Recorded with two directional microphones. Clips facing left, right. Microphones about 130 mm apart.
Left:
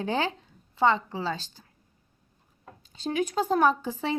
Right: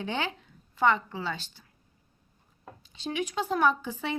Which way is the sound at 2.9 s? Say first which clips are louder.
Left 4 dB; 40° left (ahead or behind).